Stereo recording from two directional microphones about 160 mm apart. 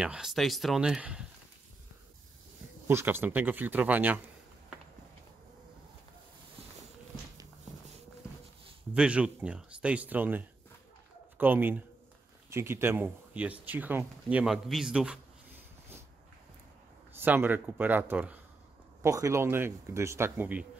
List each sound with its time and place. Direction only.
0.0 s speech: 5° right (ahead or behind)
2.9 s speech: 15° right (ahead or behind)
8.9 s speech: 5° right (ahead or behind)
17.1 s speech: 10° right (ahead or behind)
19.0 s speech: 20° right (ahead or behind)